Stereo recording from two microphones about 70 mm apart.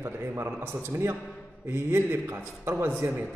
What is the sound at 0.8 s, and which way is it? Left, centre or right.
A man's voice, right.